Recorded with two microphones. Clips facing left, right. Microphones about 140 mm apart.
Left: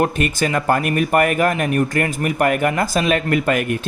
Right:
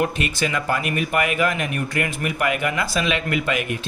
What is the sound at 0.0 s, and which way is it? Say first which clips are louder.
Speech: left 4 dB; 45° left (ahead or behind).